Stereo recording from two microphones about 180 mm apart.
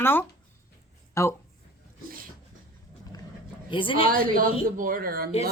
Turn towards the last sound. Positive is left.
turn(degrees=-55)  # may be behind; listen again after turning